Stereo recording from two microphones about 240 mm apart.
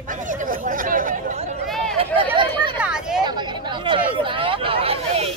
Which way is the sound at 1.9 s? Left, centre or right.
Right.